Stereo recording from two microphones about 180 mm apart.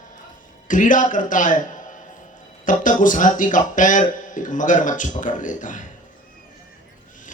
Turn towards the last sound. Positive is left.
turn(degrees=45)  # may be behind; listen again after turning